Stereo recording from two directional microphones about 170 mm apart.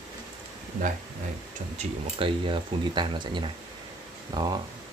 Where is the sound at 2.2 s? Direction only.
30° right (ahead or behind).